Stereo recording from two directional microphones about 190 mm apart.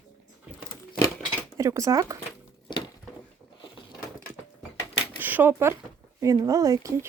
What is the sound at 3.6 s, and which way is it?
Mechanisms, 25° left (ahead or behind).